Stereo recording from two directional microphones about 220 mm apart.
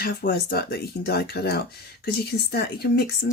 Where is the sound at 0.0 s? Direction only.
45° left (ahead or behind).